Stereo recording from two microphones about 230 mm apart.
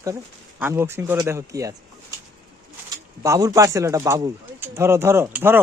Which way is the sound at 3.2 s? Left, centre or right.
Centre.